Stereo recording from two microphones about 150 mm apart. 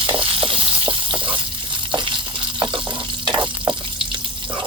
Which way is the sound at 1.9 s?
30° right (ahead or behind).